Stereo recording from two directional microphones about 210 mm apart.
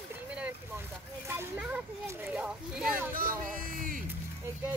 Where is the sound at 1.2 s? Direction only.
10° right (ahead or behind).